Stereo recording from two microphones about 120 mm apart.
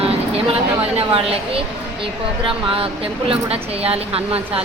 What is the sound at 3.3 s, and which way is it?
A woman's voice, 55° right (ahead or behind).